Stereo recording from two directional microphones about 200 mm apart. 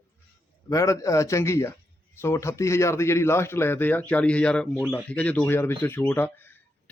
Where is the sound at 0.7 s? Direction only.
15° left (ahead or behind).